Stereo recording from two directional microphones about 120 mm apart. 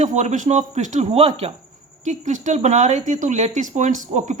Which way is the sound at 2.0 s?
90° right.